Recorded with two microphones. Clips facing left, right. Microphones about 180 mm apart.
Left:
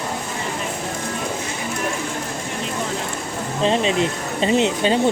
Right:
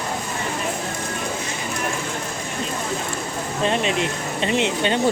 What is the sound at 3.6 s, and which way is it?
Speech, 30° left (ahead or behind).